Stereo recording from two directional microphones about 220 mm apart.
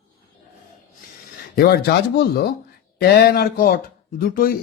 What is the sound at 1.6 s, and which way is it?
A man's voice, 45° left (ahead or behind).